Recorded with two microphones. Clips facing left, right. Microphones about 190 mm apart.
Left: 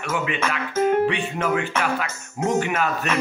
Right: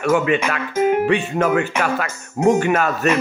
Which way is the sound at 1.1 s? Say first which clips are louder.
Right 6 dB; 45° right (ahead or behind).